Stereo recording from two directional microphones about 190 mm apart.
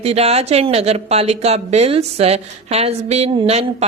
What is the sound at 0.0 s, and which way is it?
A woman's voice, 35° right (ahead or behind).